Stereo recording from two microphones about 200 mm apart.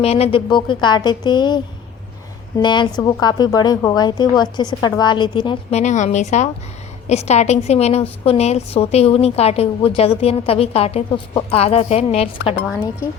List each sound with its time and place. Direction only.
0.0 s a woman's voice: 30° left (ahead or behind)
5.8 s a woman's voice: 35° left (ahead or behind)